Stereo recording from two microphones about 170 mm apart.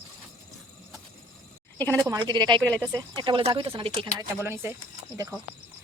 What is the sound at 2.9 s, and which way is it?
Speech, 25° right (ahead or behind).